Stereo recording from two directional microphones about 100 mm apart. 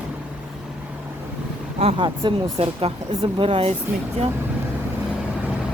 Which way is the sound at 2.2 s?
50° right (ahead or behind).